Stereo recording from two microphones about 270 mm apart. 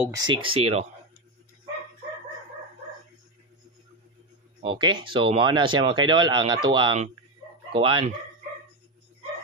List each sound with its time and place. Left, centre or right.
0.0 s speech: centre
4.7 s speech: centre